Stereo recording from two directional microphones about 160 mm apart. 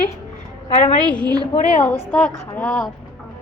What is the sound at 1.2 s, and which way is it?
Speech, 25° right (ahead or behind).